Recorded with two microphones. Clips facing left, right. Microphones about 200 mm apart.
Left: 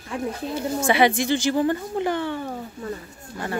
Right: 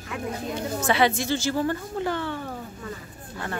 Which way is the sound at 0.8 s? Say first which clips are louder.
Left 3 dB; 10° left (ahead or behind).